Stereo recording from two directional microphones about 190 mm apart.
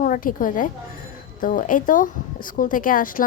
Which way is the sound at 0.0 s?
45° left (ahead or behind).